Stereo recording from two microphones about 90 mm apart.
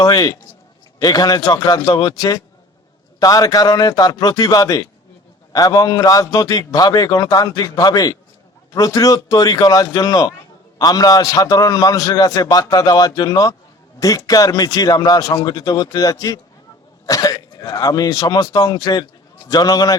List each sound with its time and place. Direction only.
0.0 s a man's voice: 45° left (ahead or behind)